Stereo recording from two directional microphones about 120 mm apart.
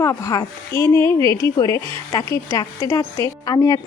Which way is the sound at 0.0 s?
30° left (ahead or behind).